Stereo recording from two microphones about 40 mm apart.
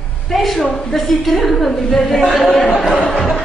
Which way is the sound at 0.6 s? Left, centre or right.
Centre.